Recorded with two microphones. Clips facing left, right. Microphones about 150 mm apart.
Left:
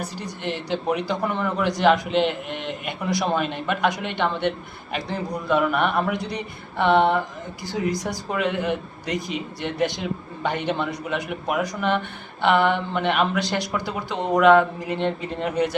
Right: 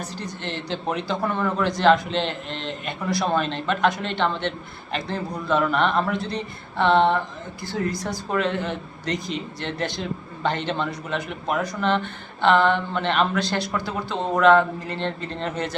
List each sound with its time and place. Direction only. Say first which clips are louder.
0.0 s a man's voice: left 2 dB; 10° left (ahead or behind)